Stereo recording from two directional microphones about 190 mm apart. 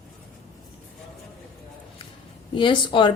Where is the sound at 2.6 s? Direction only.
25° left (ahead or behind).